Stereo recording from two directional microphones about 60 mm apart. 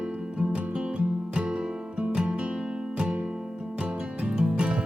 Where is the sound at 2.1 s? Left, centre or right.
Centre.